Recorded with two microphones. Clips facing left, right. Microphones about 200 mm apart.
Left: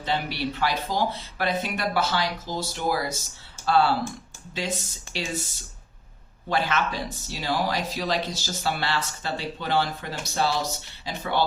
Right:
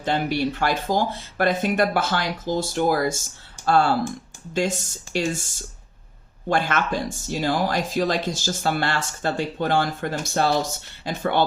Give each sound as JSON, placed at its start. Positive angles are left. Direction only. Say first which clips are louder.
{"t": 0.0, "sound": "speech", "louder": "right 5 dB", "side_deg": -50}
{"t": 5.1, "sound": "speech", "louder": "right 7 dB", "side_deg": -50}